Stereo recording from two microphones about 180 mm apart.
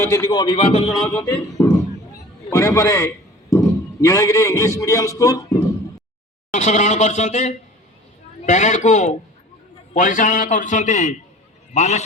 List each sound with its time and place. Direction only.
0.0 s a man's voice: 15° left (ahead or behind); by 0.8 s 30° left (ahead or behind)
0.9 s a man's voice: 10° left (ahead or behind)
3.5 s a sound: 15° left (ahead or behind)
4.0 s a man's voice: 15° left (ahead or behind)
6.5 s a man's voice: 40° left (ahead or behind)